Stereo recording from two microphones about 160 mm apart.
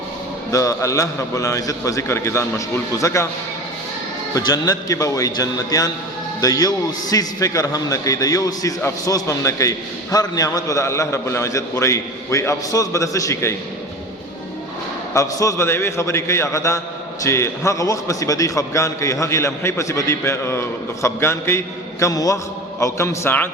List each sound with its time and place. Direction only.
0.5 s a man's voice: 20° left (ahead or behind)
4.4 s a man's voice: 25° left (ahead or behind)
15.1 s a man's voice: 20° left (ahead or behind)